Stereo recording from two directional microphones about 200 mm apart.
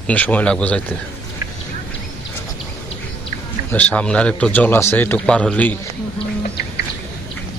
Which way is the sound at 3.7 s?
5° left (ahead or behind).